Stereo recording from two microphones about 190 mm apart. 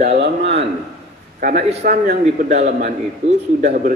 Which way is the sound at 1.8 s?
60° right (ahead or behind).